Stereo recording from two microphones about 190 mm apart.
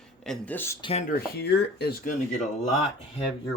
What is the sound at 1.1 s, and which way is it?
Speech, 55° left (ahead or behind).